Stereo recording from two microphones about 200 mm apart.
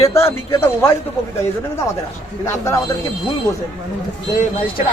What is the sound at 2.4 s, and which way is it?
Speech, 15° left (ahead or behind).